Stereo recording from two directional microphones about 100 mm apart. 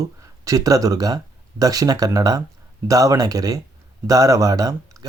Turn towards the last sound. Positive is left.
turn(degrees=-35)  # may be behind; listen again after turning